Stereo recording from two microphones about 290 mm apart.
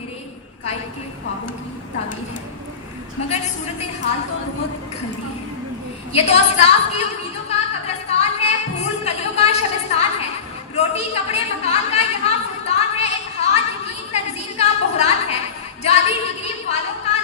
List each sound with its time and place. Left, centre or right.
6.1 s a sound: left
15.8 s speech: left
17.1 s music: left